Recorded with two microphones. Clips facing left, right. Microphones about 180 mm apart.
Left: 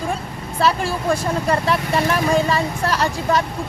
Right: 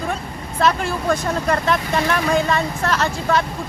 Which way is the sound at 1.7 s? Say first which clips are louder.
Even; 10° left (ahead or behind).